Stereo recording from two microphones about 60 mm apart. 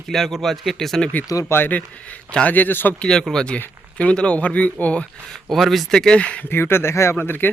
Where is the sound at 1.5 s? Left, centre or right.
Left.